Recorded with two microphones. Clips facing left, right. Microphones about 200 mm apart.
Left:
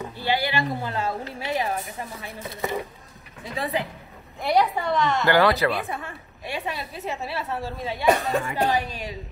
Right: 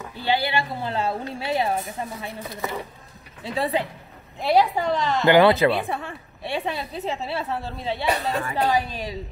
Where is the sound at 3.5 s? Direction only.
30° right (ahead or behind).